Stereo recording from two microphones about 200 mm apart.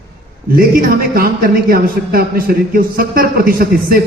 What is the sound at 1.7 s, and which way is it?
A man's voice, 50° right (ahead or behind).